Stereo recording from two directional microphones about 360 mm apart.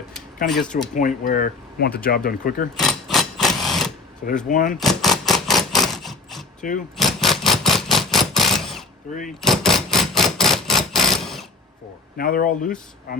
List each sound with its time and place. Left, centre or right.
0.4 s speech: left
2.7 s sewing machine: centre
4.4 s speech: left
4.8 s a sound: centre
6.6 s speech: left
6.9 s a sound: centre
12.1 s speech: left